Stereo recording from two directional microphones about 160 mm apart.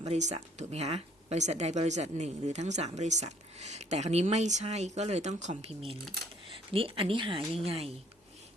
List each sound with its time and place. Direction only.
0.0 s speech: 45° right (ahead or behind)